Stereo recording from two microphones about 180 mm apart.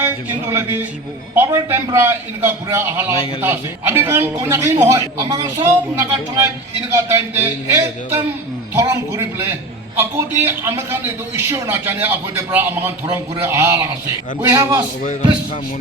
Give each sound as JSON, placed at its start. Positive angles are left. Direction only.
{"t": 0.5, "sound": "a man's voice", "side_deg": -10}